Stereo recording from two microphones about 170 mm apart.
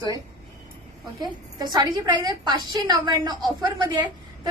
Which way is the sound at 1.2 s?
25° right (ahead or behind).